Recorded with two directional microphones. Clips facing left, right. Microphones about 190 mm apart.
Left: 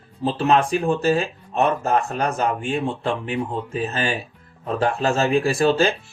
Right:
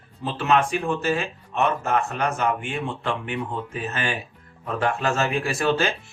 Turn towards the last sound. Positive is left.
turn(degrees=30)  # may be behind; listen again after turning